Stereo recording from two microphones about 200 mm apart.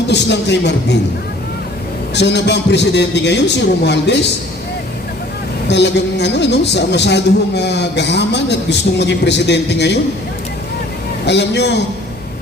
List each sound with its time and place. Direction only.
0.1 s a woman's voice: 60° left (ahead or behind)
2.1 s a woman's voice: 60° left (ahead or behind)
5.6 s a woman's voice: 60° left (ahead or behind)
11.3 s a woman's voice: 60° left (ahead or behind)